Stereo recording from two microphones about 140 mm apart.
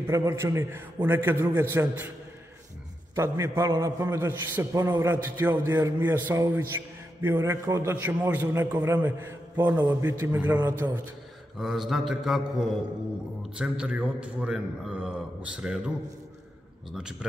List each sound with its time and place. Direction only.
0.0 s a man's voice: 20° right (ahead or behind)
3.2 s a man's voice: 20° right (ahead or behind)
11.5 s speech: centre (ahead or behind)
13.6 s a man's voice: 10° right (ahead or behind)
16.9 s speech: 5° right (ahead or behind)